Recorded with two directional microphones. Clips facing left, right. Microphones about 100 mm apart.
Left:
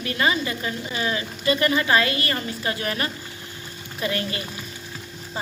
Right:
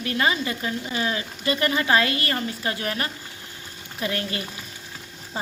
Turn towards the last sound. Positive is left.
turn(degrees=-25)  # may be behind; listen again after turning